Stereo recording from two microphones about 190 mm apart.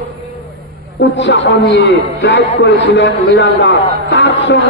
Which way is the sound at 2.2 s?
70° left (ahead or behind).